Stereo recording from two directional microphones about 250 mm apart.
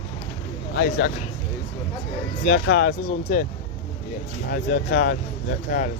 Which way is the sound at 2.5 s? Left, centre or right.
Left.